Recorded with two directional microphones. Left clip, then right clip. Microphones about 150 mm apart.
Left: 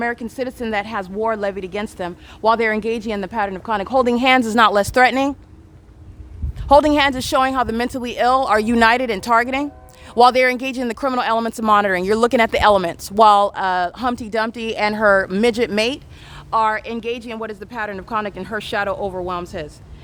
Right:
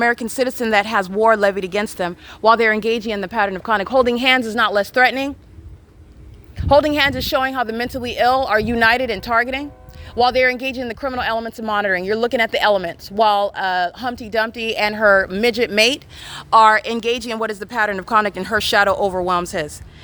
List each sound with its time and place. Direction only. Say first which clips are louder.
0.0 s a woman's voice: right 5 dB; 30° right (ahead or behind); by 3.3 s centre (ahead or behind)
3.3 s speech: right 4 dB; 10° right (ahead or behind); by 4.4 s 10° left (ahead or behind)
4.4 s speech: left 3 dB; 30° left (ahead or behind)
6.7 s speech: left 1 dB; 15° left (ahead or behind)
10.2 s speech: left 3 dB; 35° left (ahead or behind)
10.4 s speech: even; 25° left (ahead or behind)
11.3 s speech: left 4 dB; 40° left (ahead or behind)
11.7 s speech: left 3 dB; 25° left (ahead or behind)
15.7 s speech: right 4 dB; 5° right (ahead or behind)
16.3 s speech: right 7 dB; 35° right (ahead or behind)